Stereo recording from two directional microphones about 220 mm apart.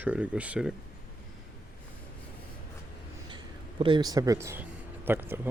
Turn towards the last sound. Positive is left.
turn(degrees=-10)  # may be behind; listen again after turning